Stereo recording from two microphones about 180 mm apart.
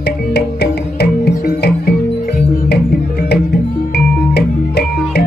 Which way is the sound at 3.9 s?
65° left (ahead or behind).